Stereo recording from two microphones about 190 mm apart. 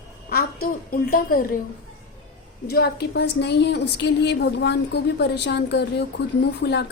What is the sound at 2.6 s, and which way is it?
A woman's voice, 55° left (ahead or behind).